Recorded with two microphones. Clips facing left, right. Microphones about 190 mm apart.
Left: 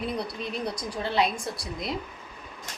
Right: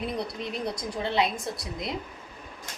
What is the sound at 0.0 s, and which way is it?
A woman's voice, 20° right (ahead or behind).